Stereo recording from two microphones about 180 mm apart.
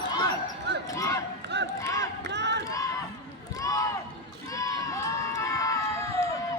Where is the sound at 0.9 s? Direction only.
15° left (ahead or behind).